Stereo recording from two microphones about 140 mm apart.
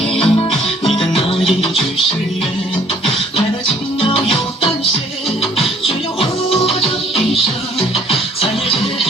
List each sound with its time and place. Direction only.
0.1 s music: 5° left (ahead or behind)
4.0 s music: 40° left (ahead or behind)
5.8 s music: 45° left (ahead or behind)